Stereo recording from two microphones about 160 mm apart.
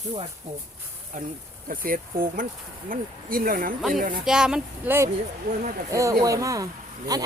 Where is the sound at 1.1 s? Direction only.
55° right (ahead or behind).